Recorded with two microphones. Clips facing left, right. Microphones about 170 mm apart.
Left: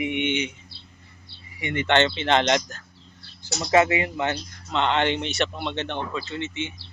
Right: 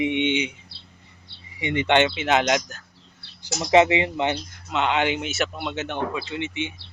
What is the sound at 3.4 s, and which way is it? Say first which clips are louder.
Speech: right 2 dB; 15° right (ahead or behind).